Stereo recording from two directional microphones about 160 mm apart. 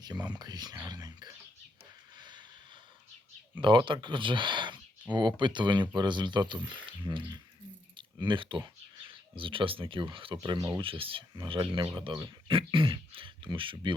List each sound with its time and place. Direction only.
0.0 s speech: 25° right (ahead or behind)
2.1 s vehicle: 25° right (ahead or behind)
3.6 s speech: 30° right (ahead or behind)